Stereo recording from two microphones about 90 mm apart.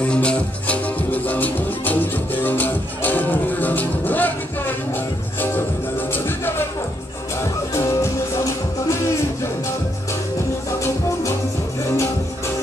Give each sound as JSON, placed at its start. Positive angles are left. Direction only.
{"t": 0.0, "sound": "music", "side_deg": 10}
{"t": 6.1, "sound": "music", "side_deg": 25}
{"t": 7.7, "sound": "music", "side_deg": 35}